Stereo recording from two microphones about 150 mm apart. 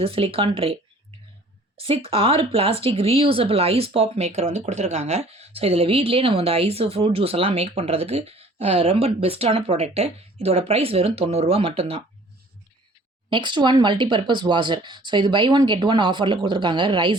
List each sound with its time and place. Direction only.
0.0 s speech: 40° right (ahead or behind)
13.3 s speech: 30° right (ahead or behind)